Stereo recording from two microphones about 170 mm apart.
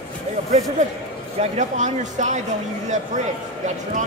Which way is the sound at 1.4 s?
45° right (ahead or behind).